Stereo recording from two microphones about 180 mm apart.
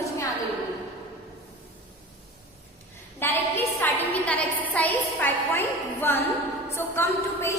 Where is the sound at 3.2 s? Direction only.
10° left (ahead or behind).